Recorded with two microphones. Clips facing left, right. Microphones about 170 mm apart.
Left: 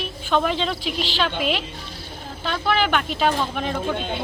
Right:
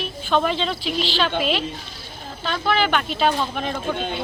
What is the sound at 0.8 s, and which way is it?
Speech, 50° left (ahead or behind).